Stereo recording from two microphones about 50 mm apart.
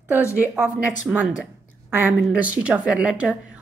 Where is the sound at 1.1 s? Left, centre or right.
Right.